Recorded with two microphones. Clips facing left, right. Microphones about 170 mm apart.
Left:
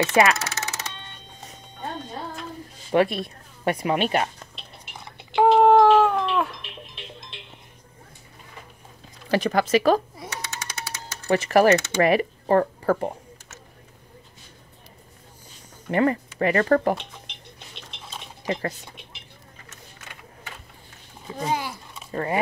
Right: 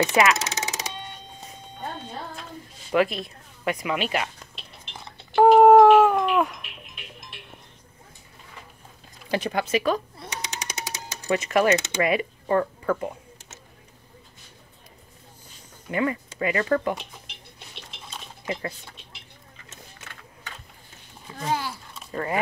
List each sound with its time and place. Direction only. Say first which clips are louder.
0.4 s music: right 1 dB; 15° right (ahead or behind)
2.9 s speech: left 2 dB; 35° left (ahead or behind)
5.4 s cat: right 3 dB; 5° right (ahead or behind)
6.6 s music: left 4 dB; 30° left (ahead or behind)
9.3 s speech: left 4 dB; 40° left (ahead or behind)
10.3 s a sound: right 2 dB; 15° right (ahead or behind)
11.2 s speech: left 4 dB; 35° left (ahead or behind)
11.7 s speech: left 3 dB; 20° right (ahead or behind)
12.0 s speech: left 4 dB; 40° left (ahead or behind)
15.9 s speech: left 4 dB; 45° left (ahead or behind)
16.9 s a sound: left 4 dB; 5° right (ahead or behind)
21.4 s a sound: left 1 dB; 15° left (ahead or behind)
22.1 s speech: left 2 dB; 30° left (ahead or behind)